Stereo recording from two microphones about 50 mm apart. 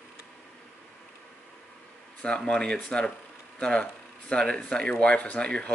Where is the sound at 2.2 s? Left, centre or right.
Centre.